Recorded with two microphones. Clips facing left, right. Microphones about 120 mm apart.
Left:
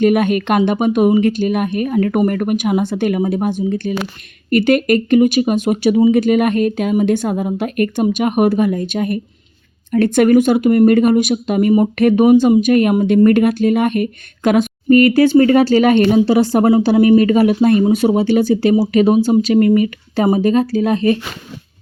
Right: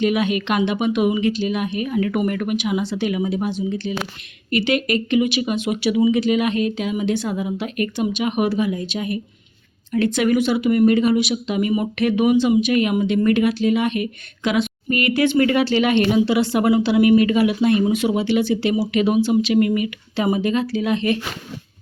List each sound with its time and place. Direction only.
0.0 s speech: 50° left (ahead or behind)